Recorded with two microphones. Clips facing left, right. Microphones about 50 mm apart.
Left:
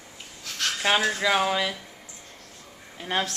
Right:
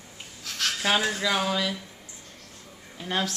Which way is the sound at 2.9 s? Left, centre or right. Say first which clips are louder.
Left 2 dB; centre.